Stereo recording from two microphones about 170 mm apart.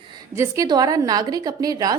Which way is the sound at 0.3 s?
20° right (ahead or behind).